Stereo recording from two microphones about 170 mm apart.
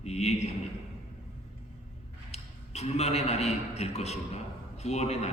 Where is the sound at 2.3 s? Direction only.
40° left (ahead or behind).